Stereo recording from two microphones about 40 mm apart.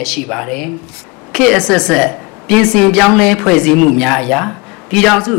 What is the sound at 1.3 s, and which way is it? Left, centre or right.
A man's voice, centre.